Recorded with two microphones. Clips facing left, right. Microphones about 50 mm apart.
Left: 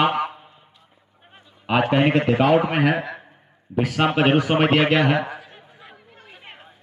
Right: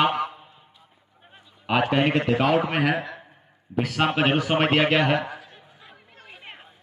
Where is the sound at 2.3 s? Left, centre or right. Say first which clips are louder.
Left 4 dB; centre.